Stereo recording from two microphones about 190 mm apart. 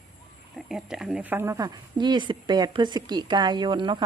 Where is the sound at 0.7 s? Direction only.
5° right (ahead or behind).